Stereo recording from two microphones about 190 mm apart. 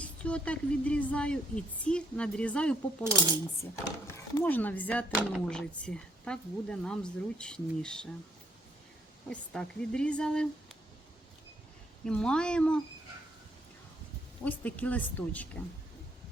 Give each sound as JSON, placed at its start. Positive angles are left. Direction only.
{"t": 0.0, "sound": "speech", "side_deg": 5}
{"t": 3.0, "sound": "speech", "side_deg": -15}
{"t": 4.1, "sound": "speech", "side_deg": 10}
{"t": 9.3, "sound": "speech", "side_deg": 5}
{"t": 12.0, "sound": "speech", "side_deg": 5}
{"t": 14.4, "sound": "speech", "side_deg": 10}